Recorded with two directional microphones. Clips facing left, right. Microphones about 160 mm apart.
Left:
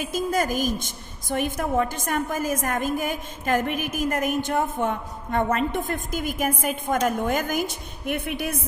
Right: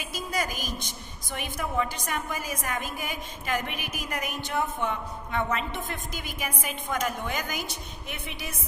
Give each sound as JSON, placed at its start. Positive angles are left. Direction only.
{"t": 0.0, "sound": "a woman's voice", "side_deg": 50}